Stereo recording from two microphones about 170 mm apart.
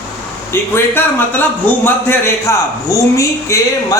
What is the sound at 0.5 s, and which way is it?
A man's voice, 10° left (ahead or behind).